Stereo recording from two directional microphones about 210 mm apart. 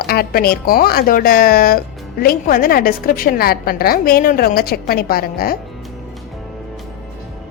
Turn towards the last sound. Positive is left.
turn(degrees=45)  # may be behind; listen again after turning